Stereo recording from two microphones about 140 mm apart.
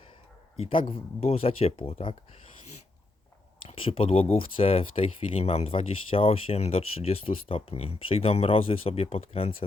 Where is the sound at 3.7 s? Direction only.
40° left (ahead or behind).